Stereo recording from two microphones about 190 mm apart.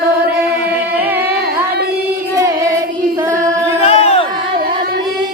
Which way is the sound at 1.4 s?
55° right (ahead or behind).